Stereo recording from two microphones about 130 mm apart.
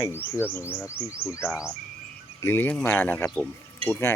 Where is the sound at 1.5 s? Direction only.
5° right (ahead or behind).